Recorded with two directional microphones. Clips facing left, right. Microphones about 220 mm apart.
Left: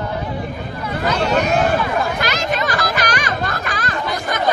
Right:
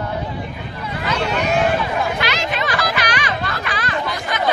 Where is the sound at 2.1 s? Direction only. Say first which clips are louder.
Left 2 dB; 45° left (ahead or behind).